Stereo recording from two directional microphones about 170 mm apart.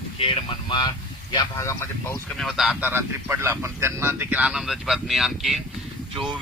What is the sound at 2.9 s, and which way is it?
Speech, 15° right (ahead or behind).